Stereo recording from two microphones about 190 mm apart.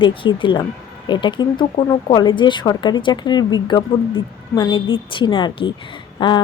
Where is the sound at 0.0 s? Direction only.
25° left (ahead or behind).